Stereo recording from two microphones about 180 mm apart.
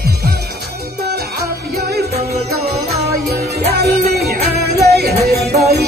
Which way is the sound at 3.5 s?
60° right (ahead or behind).